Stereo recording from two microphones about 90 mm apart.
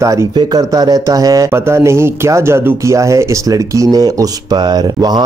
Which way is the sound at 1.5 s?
30° right (ahead or behind).